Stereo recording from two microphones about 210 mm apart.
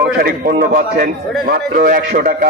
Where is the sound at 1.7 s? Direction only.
40° right (ahead or behind).